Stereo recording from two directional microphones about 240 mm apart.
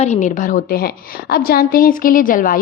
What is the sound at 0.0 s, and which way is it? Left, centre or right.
A woman's voice, left.